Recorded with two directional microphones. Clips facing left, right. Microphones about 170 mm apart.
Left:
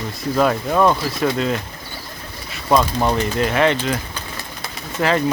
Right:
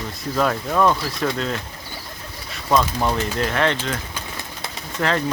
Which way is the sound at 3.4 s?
10° left (ahead or behind).